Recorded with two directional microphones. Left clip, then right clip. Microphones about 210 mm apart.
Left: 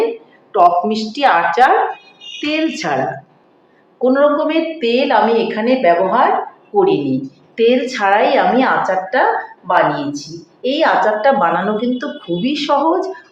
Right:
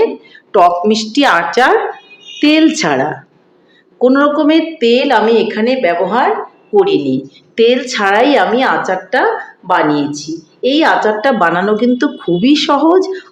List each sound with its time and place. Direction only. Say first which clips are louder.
0.5 s a woman's voice: right 2 dB; 55° right (ahead or behind)
4.0 s a woman's voice: right 3 dB; 55° right (ahead or behind)